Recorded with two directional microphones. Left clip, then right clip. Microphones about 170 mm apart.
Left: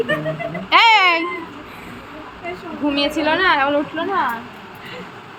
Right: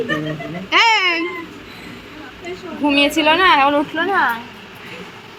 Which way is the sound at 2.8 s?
30° right (ahead or behind).